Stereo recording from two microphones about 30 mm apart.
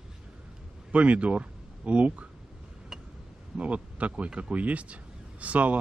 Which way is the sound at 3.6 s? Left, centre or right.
Right.